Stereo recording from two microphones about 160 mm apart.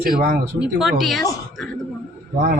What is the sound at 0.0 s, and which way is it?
Speech, 65° right (ahead or behind).